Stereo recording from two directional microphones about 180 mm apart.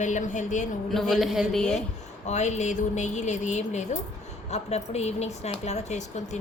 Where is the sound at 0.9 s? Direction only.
Centre (ahead or behind).